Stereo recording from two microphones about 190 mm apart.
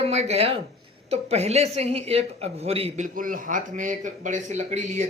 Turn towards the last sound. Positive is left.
turn(degrees=-40)  # may be behind; listen again after turning